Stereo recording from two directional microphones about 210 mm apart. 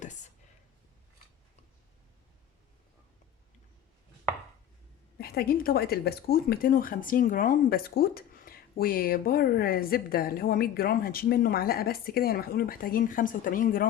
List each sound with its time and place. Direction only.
5.1 s speech: 45° left (ahead or behind)